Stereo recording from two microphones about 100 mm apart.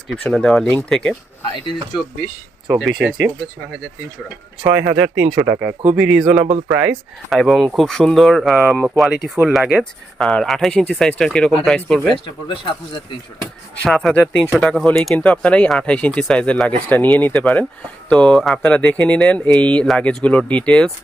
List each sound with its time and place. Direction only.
0.1 s speech: 5° left (ahead or behind)
2.6 s speech: 5° right (ahead or behind)
4.6 s speech: 20° right (ahead or behind)
6.0 s speech: 5° right (ahead or behind)
7.3 s speech: centre (ahead or behind)
12.5 s speech: 50° left (ahead or behind)
13.8 s speech: 5° left (ahead or behind)